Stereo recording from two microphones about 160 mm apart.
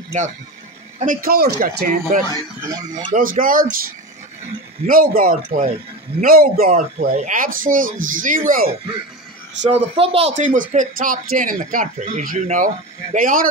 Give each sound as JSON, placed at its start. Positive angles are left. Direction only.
{"t": 0.9, "sound": "speech", "side_deg": -60}
{"t": 2.6, "sound": "speech", "side_deg": -25}
{"t": 3.1, "sound": "speech", "side_deg": -60}
{"t": 4.8, "sound": "a man's voice", "side_deg": -65}
{"t": 7.2, "sound": "speech", "side_deg": -55}
{"t": 9.6, "sound": "speech", "side_deg": -40}